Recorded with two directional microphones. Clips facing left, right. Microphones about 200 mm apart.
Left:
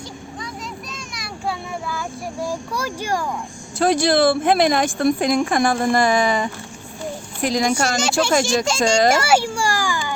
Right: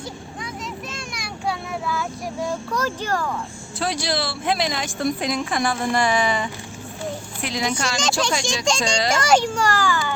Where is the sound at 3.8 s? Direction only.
50° left (ahead or behind).